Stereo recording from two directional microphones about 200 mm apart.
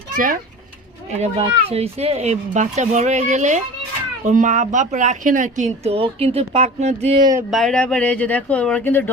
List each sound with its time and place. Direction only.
1.1 s a woman's voice: 30° right (ahead or behind)
7.5 s speech: 5° left (ahead or behind)